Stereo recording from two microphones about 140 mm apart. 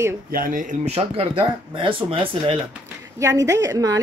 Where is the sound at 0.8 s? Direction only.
45° right (ahead or behind).